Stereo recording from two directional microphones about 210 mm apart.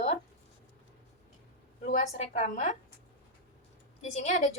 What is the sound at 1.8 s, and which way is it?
Speech, 30° left (ahead or behind).